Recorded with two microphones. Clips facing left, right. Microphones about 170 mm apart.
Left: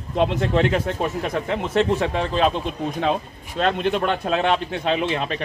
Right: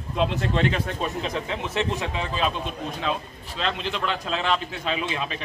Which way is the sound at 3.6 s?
50° left (ahead or behind).